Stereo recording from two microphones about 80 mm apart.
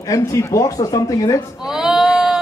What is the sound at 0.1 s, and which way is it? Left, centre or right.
Speech, left.